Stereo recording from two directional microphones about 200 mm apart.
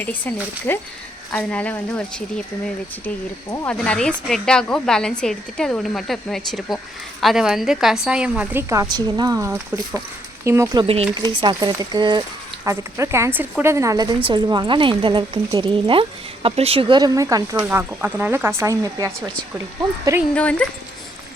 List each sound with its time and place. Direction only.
0.0 s speech: 10° left (ahead or behind)
3.5 s a woman's voice: 10° left (ahead or behind); by 10.8 s 15° right (ahead or behind)
10.8 s a woman's voice: 30° right (ahead or behind)
20.3 s speech: 5° left (ahead or behind)